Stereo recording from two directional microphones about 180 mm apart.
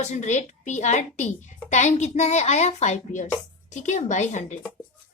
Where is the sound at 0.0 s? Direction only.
40° left (ahead or behind).